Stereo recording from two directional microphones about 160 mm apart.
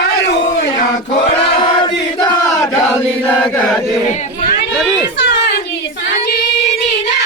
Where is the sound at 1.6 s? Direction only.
30° left (ahead or behind).